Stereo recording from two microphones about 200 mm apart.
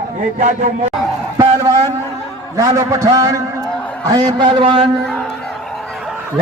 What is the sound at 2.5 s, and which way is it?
A man's voice, 15° right (ahead or behind).